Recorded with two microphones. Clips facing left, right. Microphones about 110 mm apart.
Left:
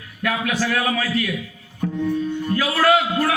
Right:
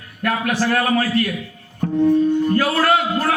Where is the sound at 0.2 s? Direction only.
50° right (ahead or behind).